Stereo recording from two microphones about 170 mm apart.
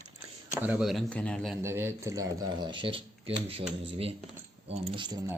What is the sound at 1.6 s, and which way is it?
Speech, 15° right (ahead or behind).